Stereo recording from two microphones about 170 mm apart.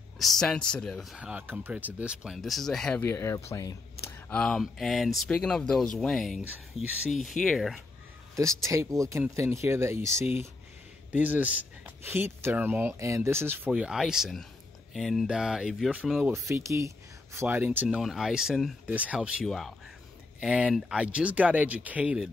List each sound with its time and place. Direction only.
0.2 s speech: centre (ahead or behind)
3.0 s speech: 15° left (ahead or behind)
4.3 s speech: 5° left (ahead or behind)
8.4 s speech: 20° right (ahead or behind)
16.3 s speech: 15° right (ahead or behind)